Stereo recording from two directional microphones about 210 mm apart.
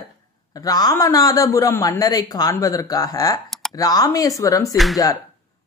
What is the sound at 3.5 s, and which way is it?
Computer keyboard, centre (ahead or behind).